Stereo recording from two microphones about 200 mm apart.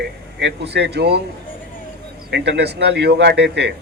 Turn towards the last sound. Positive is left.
turn(degrees=-60)  # may be behind; listen again after turning